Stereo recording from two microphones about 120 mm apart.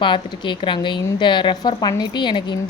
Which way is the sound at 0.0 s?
40° left (ahead or behind).